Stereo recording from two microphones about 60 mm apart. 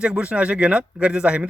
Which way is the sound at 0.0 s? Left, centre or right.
Centre.